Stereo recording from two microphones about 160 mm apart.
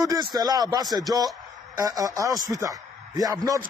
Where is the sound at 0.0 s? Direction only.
25° right (ahead or behind).